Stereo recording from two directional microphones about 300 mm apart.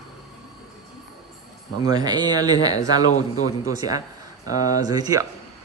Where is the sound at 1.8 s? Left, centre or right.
Centre.